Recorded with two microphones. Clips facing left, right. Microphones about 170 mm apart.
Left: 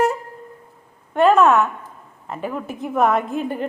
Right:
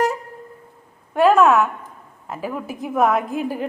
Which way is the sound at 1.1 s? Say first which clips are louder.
Even; 5° right (ahead or behind).